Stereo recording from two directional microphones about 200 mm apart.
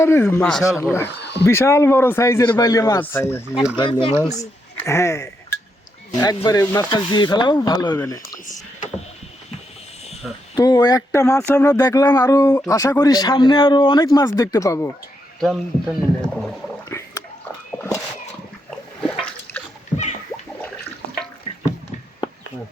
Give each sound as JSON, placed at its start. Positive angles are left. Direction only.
{"t": 0.0, "sound": "speech", "side_deg": 15}
{"t": 1.2, "sound": "a sound", "side_deg": 60}
{"t": 1.5, "sound": "speech", "side_deg": 15}
{"t": 3.8, "sound": "speech", "side_deg": 25}
{"t": 10.2, "sound": "speech", "side_deg": 0}
{"t": 10.6, "sound": "speech", "side_deg": 20}
{"t": 15.4, "sound": "speech", "side_deg": 0}
{"t": 16.9, "sound": "pig", "side_deg": 15}
{"t": 19.1, "sound": "splash", "side_deg": 5}